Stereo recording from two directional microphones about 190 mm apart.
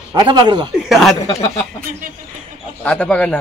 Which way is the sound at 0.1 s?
25° right (ahead or behind).